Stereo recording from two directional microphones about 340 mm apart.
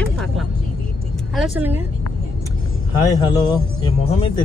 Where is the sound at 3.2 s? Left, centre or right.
Centre.